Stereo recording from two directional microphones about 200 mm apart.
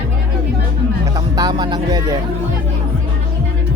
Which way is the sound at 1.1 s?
20° right (ahead or behind).